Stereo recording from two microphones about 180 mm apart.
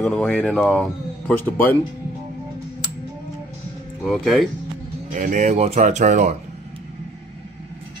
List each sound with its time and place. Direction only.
0.0 s speech: 5° left (ahead or behind)
4.0 s speech: centre (ahead or behind)
5.1 s speech: 45° right (ahead or behind)